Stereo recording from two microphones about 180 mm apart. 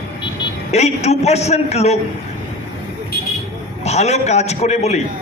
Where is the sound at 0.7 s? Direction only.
35° left (ahead or behind).